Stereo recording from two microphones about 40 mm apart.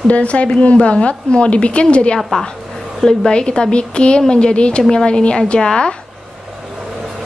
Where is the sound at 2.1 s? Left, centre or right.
Centre.